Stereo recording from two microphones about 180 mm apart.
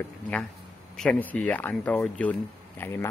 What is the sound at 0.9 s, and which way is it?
Speech, 5° left (ahead or behind).